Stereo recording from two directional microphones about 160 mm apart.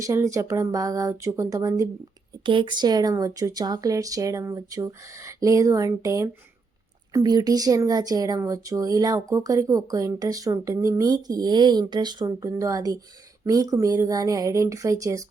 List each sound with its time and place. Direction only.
0.0 s speech: 20° right (ahead or behind)
2.5 s speech: 30° right (ahead or behind)